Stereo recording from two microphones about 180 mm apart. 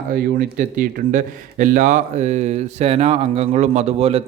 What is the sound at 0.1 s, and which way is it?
Speech, 55° right (ahead or behind).